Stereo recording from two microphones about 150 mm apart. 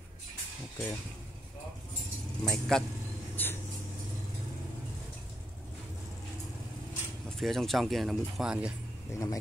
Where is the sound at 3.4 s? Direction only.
15° left (ahead or behind).